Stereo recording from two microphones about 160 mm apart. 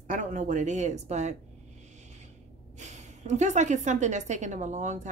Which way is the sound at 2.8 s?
45° right (ahead or behind).